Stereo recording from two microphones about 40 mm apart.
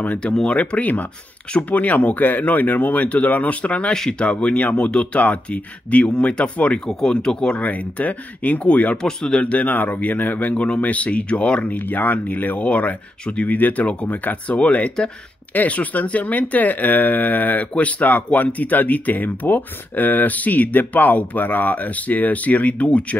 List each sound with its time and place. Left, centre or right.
0.2 s speech: left
0.6 s speech: left
3.9 s speech: centre
4.2 s speech: left
6.9 s speech: centre
7.6 s speech: left
8.9 s speech: centre
9.4 s speech: left
11.6 s speech: left
12.5 s speech: left
17.7 s speech: left